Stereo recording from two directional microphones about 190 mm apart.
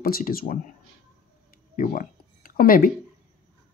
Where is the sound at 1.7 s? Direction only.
45° left (ahead or behind).